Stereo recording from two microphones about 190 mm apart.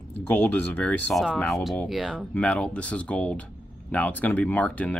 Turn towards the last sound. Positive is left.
turn(degrees=5)  # may be behind; listen again after turning